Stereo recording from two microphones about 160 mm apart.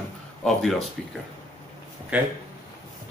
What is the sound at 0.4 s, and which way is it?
Speech, 5° left (ahead or behind).